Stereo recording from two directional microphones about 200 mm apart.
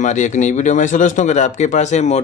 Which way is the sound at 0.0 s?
35° left (ahead or behind).